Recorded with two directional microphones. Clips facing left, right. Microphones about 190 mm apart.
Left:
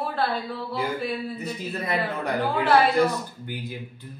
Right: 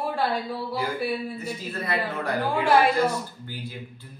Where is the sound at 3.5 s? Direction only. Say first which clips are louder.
Left 3 dB; 15° left (ahead or behind).